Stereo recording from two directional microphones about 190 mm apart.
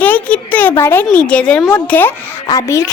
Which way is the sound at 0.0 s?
10° left (ahead or behind).